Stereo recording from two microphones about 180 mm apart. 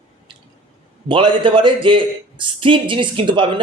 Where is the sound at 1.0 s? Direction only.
30° right (ahead or behind).